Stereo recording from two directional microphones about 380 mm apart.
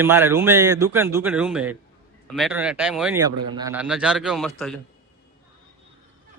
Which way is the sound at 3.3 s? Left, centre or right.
Right.